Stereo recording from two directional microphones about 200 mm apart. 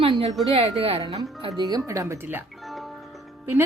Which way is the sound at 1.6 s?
15° right (ahead or behind).